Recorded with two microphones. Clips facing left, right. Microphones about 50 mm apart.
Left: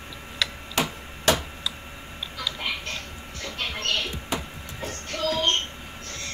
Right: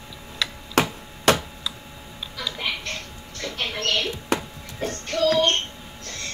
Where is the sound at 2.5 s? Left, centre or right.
Right.